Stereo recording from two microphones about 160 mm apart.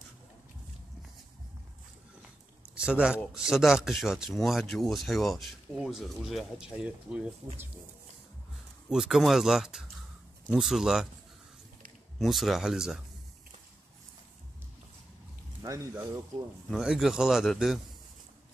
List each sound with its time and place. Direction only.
2.7 s speech: 5° right (ahead or behind)
8.8 s speech: centre (ahead or behind)
12.2 s speech: centre (ahead or behind)
15.6 s speech: 20° right (ahead or behind)
16.7 s speech: centre (ahead or behind)